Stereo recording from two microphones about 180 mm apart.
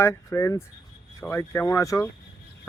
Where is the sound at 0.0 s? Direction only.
15° left (ahead or behind).